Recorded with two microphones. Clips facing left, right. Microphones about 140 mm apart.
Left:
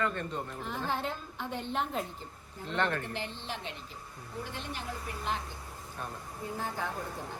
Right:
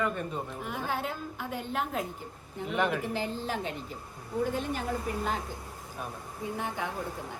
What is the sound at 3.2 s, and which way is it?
Speech, 40° right (ahead or behind).